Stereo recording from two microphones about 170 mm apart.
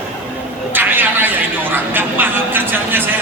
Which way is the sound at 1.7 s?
10° right (ahead or behind).